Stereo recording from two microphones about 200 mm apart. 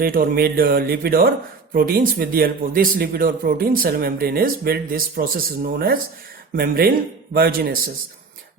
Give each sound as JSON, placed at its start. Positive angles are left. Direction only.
{"t": 0.0, "sound": "speech", "side_deg": -45}